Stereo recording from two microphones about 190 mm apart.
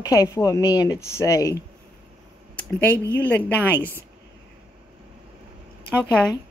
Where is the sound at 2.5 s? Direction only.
10° left (ahead or behind).